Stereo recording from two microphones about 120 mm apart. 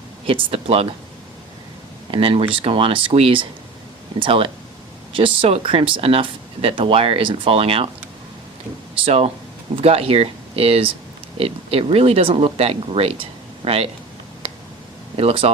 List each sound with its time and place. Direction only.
0.3 s speech: 50° right (ahead or behind)
2.0 s speech: 45° right (ahead or behind)
9.0 s speech: 55° right (ahead or behind)
15.2 s speech: 55° right (ahead or behind)